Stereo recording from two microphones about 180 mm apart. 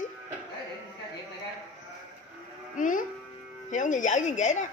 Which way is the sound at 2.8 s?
45° left (ahead or behind).